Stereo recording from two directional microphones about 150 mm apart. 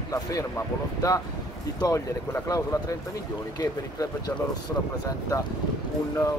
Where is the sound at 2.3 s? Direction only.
20° left (ahead or behind).